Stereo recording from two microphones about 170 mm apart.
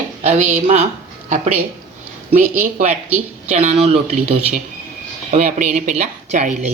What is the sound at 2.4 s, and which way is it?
Speech, 50° right (ahead or behind).